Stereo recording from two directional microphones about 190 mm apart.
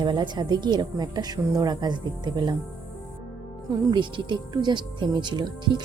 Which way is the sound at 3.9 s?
25° right (ahead or behind).